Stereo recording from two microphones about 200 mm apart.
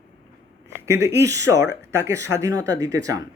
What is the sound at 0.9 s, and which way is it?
Speech, 15° right (ahead or behind).